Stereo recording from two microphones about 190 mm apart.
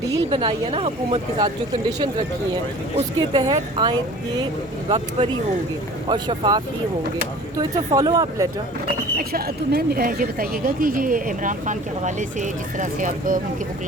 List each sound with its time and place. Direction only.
0.3 s speech: 30° right (ahead or behind)
2.9 s speech: 25° right (ahead or behind)
7.6 s speech: 20° right (ahead or behind)
9.1 s speech: 50° right (ahead or behind)